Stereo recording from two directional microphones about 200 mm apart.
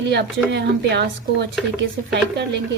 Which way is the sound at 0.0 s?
60° right (ahead or behind).